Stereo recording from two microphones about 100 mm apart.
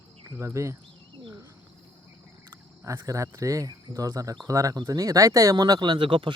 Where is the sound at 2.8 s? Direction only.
30° right (ahead or behind).